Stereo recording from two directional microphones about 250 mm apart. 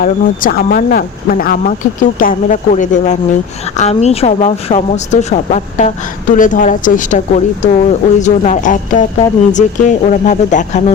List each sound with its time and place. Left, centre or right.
0.0 s speech: left